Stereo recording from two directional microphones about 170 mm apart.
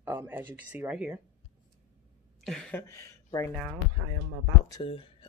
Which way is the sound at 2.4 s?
5° left (ahead or behind).